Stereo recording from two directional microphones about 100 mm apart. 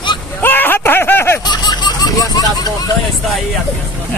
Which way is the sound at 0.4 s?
20° left (ahead or behind).